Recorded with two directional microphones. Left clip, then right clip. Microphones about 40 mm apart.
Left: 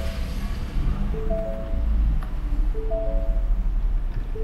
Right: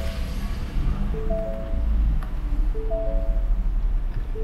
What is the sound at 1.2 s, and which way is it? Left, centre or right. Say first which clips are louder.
Music: even; centre.